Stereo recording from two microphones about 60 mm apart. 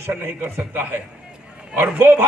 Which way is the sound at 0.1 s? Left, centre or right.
Right.